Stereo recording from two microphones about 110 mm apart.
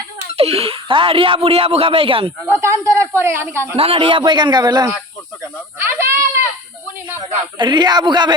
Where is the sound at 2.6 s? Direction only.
25° right (ahead or behind).